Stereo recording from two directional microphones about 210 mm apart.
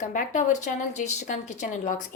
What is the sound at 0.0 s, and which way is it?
A woman's voice, 35° left (ahead or behind).